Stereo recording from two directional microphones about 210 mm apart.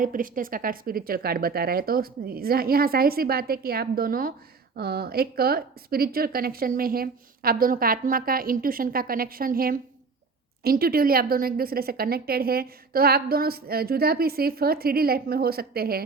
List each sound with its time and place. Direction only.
0.0 s speech: 40° right (ahead or behind)